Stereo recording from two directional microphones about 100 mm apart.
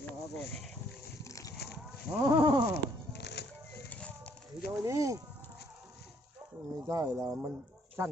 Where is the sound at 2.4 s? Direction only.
50° right (ahead or behind).